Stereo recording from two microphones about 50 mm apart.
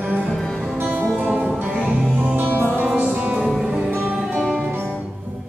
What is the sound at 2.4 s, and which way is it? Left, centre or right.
Music, right.